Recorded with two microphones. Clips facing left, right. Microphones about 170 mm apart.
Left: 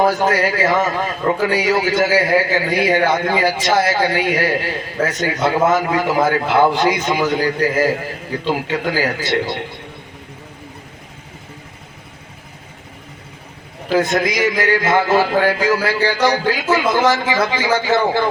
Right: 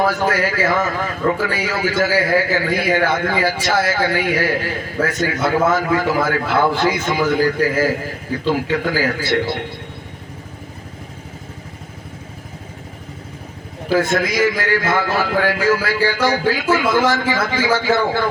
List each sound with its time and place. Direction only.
0.0 s a man's voice: 20° left (ahead or behind)
13.9 s a man's voice: 20° left (ahead or behind)